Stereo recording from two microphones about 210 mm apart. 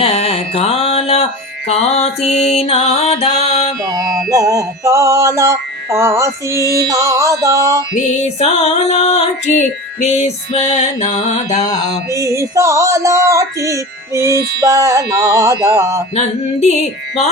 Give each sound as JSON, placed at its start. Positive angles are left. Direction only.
{"t": 0.0, "sound": "music", "side_deg": 30}
{"t": 2.2, "sound": "music", "side_deg": 0}
{"t": 2.5, "sound": "music", "side_deg": 30}
{"t": 3.8, "sound": "music", "side_deg": -15}
{"t": 7.9, "sound": "music", "side_deg": 35}
{"t": 12.1, "sound": "music", "side_deg": -15}
{"t": 14.3, "sound": "mantra", "side_deg": -50}
{"t": 14.6, "sound": "music", "side_deg": -15}
{"t": 16.1, "sound": "music", "side_deg": 30}